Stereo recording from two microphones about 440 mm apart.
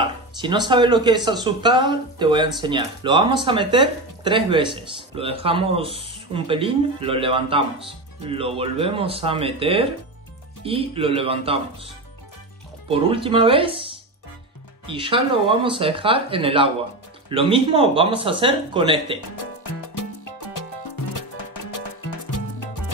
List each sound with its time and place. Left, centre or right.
0.4 s speech: centre
12.9 s speech: centre
19.9 s music: left